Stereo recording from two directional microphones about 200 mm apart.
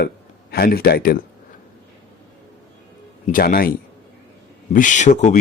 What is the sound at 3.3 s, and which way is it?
Speech, 45° left (ahead or behind).